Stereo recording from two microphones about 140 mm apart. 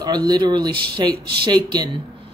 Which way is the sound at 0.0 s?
30° right (ahead or behind).